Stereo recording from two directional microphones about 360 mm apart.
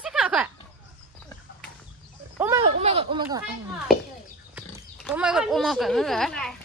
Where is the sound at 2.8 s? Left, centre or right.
Centre.